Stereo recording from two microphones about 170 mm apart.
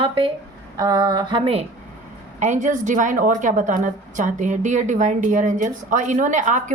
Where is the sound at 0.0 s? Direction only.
30° right (ahead or behind).